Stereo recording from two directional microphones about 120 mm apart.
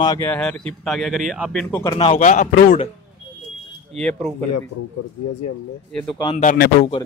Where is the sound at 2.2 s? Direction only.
90° left.